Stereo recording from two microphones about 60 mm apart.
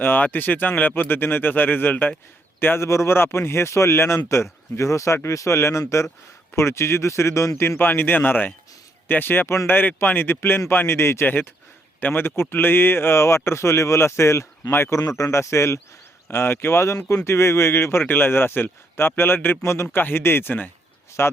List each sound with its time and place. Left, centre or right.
0.0 s speech: left
2.6 s speech: left
7.8 s speech: left
11.9 s speech: left
14.7 s speech: left
14.9 s speech: left
16.3 s speech: left
18.0 s speech: left
21.2 s speech: left